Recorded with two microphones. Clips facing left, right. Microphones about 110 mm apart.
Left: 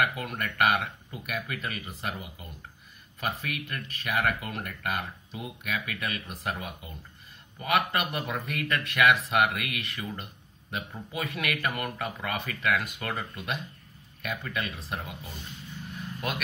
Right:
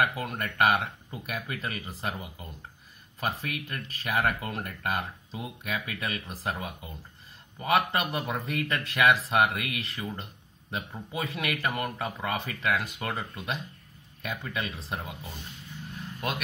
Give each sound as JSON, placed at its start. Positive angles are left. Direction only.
{"t": 0.0, "sound": "a man's voice", "side_deg": -30}